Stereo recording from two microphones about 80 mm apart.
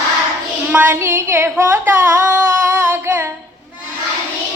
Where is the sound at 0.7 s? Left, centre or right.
Right.